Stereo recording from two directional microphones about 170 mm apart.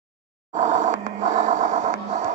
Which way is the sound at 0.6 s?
45° right (ahead or behind).